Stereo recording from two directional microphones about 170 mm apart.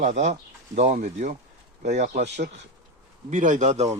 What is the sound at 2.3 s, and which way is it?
Speech, 85° right.